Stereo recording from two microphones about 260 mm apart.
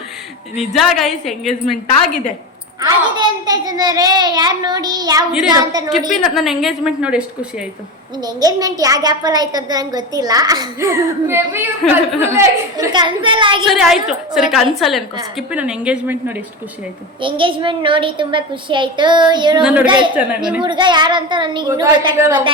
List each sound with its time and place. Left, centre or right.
0.6 s a woman's voice: centre
2.8 s a child's voice: centre
6.1 s a woman's voice: centre
8.2 s a child's voice: centre
13.7 s a woman's voice: centre
17.2 s a woman's voice: centre
19.6 s a woman's voice: centre
20.6 s a child's voice: centre